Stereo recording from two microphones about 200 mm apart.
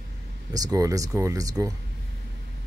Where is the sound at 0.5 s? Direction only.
20° right (ahead or behind).